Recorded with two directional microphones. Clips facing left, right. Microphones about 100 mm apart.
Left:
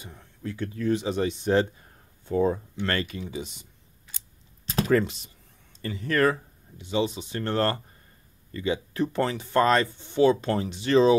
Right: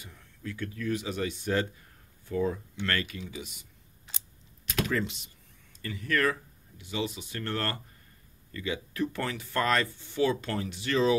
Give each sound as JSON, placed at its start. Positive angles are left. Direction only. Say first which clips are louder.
{"t": 0.0, "sound": "speech", "louder": "left 5 dB", "side_deg": 30}
{"t": 4.6, "sound": "computer keyboard", "louder": "left 5 dB", "side_deg": 35}
{"t": 4.9, "sound": "speech", "louder": "left 8 dB", "side_deg": 40}